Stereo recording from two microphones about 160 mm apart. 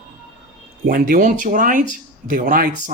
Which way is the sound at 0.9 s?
60° right (ahead or behind).